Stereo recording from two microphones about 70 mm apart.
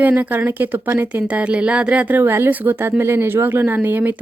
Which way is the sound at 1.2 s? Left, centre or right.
Centre.